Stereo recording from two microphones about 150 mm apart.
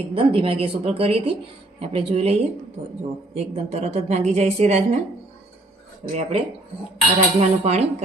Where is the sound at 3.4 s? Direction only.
45° right (ahead or behind).